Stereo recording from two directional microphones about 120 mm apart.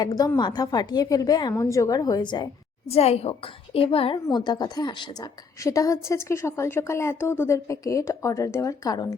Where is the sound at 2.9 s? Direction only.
60° left (ahead or behind).